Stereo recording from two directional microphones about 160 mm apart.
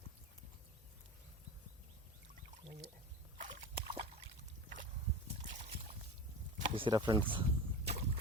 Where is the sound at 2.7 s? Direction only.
45° right (ahead or behind).